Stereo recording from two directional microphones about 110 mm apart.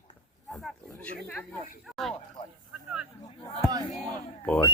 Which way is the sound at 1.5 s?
Centre (ahead or behind).